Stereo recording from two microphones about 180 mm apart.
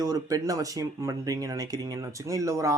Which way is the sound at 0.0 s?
20° right (ahead or behind).